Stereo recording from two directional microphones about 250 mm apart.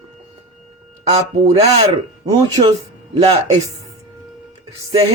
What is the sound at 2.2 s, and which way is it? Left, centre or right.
Speech, centre.